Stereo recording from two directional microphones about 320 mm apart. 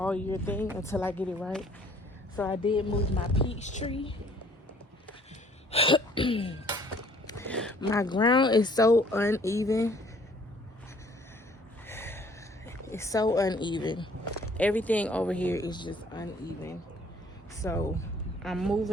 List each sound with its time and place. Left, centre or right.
0.0 s speech: centre
2.3 s speech: centre
5.7 s throat clearing: centre
7.3 s speech: centre
11.9 s snort: centre
12.6 s speech: centre